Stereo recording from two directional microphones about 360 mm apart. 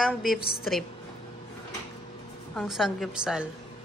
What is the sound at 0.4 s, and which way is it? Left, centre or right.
Speech, left.